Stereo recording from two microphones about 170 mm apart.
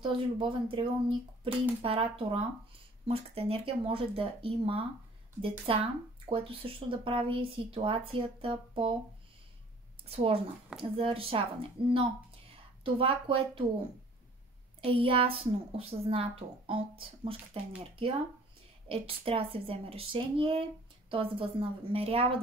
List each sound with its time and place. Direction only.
0.0 s speech: 30° right (ahead or behind)
10.0 s speech: 35° right (ahead or behind)
14.8 s speech: 30° right (ahead or behind)